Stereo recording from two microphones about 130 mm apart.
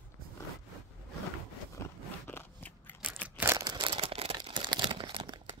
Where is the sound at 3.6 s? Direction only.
35° right (ahead or behind).